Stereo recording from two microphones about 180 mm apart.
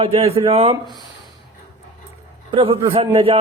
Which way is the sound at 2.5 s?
30° right (ahead or behind).